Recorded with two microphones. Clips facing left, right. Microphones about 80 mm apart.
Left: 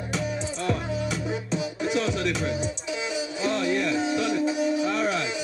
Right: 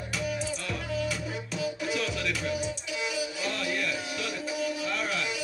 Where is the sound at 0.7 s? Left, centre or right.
Left.